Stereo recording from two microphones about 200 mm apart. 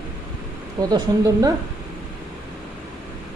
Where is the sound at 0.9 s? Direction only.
15° right (ahead or behind).